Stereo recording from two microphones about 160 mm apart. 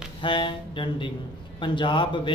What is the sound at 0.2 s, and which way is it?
A man's voice, 30° left (ahead or behind).